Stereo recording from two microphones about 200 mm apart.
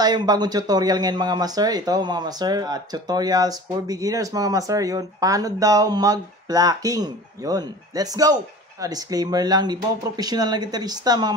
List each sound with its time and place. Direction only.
0.0 s speech: 20° right (ahead or behind)